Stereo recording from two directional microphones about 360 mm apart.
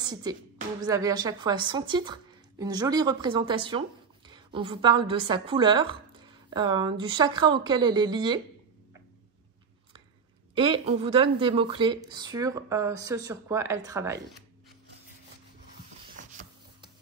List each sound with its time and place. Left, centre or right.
0.0 s a woman's voice: centre
10.5 s a woman's voice: centre
16.2 s rub: right